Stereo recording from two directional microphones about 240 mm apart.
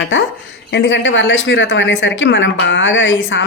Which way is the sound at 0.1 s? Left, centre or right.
Left.